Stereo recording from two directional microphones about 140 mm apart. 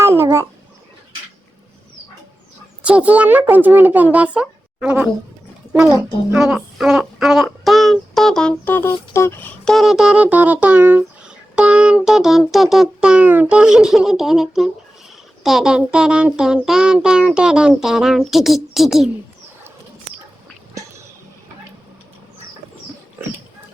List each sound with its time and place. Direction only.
0.0 s babbling: 20° right (ahead or behind)
2.8 s a child's voice: 10° right (ahead or behind); by 9.5 s 20° left (ahead or behind)
9.6 s a child's voice: centre (ahead or behind)